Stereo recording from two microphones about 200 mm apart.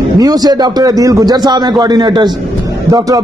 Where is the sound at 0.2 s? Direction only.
20° right (ahead or behind).